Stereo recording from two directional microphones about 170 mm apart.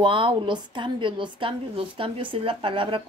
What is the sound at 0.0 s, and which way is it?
Speech, 30° right (ahead or behind).